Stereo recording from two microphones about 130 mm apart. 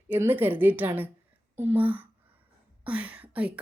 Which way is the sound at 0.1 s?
15° right (ahead or behind).